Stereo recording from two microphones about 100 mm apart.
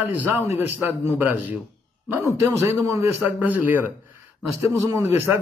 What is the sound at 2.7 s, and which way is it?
Speech, 30° right (ahead or behind).